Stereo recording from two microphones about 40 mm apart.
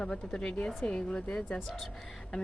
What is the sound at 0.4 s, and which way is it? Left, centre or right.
Speech, left.